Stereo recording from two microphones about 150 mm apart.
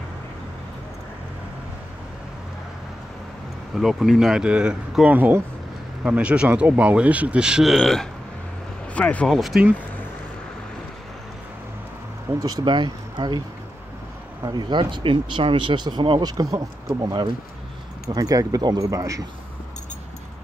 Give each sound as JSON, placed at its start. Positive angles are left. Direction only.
{"t": 3.7, "sound": "speech", "side_deg": 0}
{"t": 12.4, "sound": "speech", "side_deg": -25}
{"t": 14.4, "sound": "speech", "side_deg": -30}